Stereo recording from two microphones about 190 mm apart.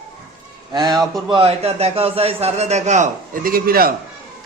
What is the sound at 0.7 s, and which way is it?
A man's voice, 20° right (ahead or behind).